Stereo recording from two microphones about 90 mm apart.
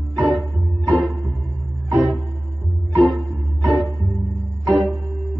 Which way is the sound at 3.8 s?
40° right (ahead or behind).